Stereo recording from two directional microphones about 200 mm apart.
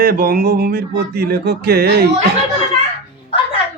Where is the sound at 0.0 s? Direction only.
50° right (ahead or behind).